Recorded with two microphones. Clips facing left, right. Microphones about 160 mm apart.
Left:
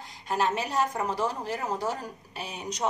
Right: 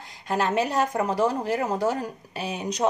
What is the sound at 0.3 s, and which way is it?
Speech, 85° right.